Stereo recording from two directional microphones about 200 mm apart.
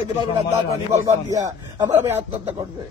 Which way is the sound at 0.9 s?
15° right (ahead or behind).